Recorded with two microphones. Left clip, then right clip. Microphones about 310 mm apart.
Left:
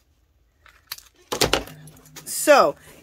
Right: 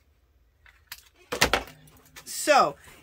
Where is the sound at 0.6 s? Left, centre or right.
Left.